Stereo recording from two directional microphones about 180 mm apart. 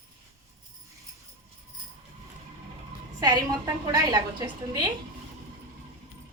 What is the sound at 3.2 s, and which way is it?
A woman's voice, 20° right (ahead or behind).